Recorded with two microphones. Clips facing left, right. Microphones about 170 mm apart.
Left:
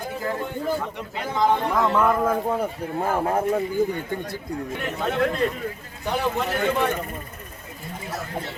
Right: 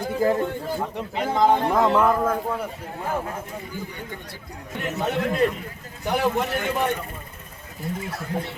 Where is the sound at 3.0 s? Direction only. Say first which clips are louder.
Left 6 dB; 55° left (ahead or behind).